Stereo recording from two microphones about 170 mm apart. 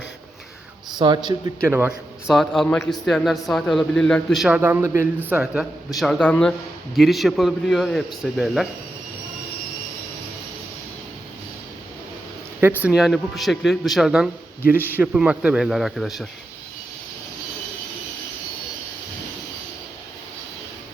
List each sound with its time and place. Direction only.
0.9 s a man's voice: 25° right (ahead or behind)
2.3 s speech: centre (ahead or behind)
12.8 s speech: 5° right (ahead or behind)